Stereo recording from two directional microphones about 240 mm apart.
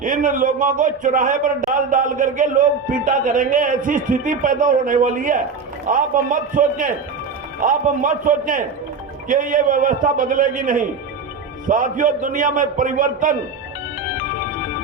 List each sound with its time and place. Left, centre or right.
0.0 s a man's voice: right